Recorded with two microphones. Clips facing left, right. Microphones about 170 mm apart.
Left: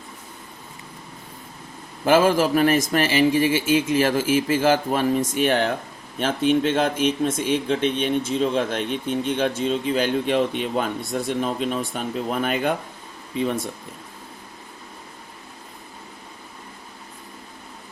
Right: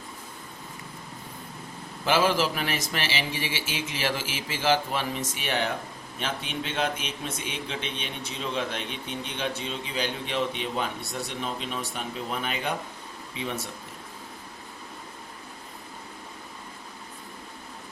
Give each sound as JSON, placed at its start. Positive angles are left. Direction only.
{"t": 2.0, "sound": "a man's voice", "side_deg": 50}